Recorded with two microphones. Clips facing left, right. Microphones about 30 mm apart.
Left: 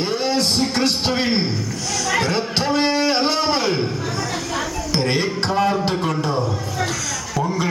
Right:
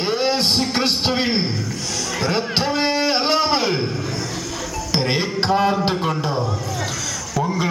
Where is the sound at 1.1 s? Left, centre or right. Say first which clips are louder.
Even; centre.